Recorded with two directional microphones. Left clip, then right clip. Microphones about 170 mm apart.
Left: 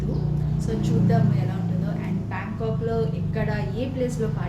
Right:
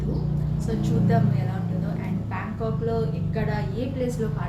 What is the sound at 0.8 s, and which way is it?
Speech, 5° left (ahead or behind).